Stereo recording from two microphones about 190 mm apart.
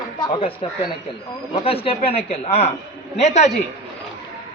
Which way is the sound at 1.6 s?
30° left (ahead or behind).